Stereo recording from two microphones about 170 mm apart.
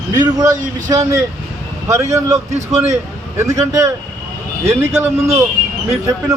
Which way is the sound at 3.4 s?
15° right (ahead or behind).